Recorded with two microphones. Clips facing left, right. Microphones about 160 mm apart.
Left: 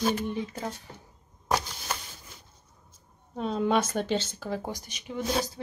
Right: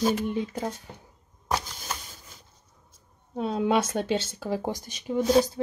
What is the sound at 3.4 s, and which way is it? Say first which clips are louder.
Speech: right 1 dB; 5° right (ahead or behind).